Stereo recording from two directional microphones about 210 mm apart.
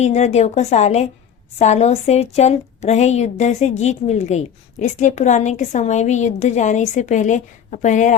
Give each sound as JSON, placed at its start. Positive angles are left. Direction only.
{"t": 0.0, "sound": "a woman's voice", "side_deg": 30}